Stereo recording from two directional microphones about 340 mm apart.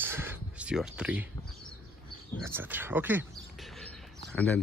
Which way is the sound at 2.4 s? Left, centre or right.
Centre.